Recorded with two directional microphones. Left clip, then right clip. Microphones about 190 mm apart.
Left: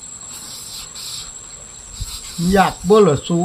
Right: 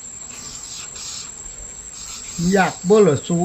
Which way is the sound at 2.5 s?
Centre (ahead or behind).